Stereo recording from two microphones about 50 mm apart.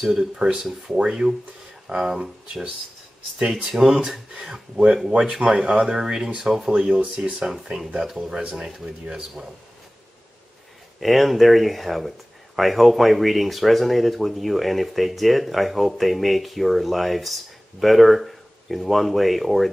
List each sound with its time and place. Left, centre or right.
0.0 s speech: centre
3.3 s speech: centre
5.1 s speech: right
6.4 s speech: centre
7.0 s speech: right
11.0 s speech: centre